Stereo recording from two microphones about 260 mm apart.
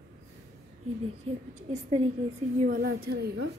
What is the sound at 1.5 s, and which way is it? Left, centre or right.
A woman's voice, right.